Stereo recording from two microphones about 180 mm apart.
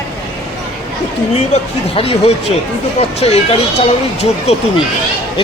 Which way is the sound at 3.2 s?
35° left (ahead or behind).